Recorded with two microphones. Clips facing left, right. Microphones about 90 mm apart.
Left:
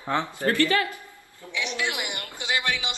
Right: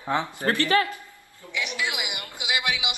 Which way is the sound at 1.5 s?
5° right (ahead or behind).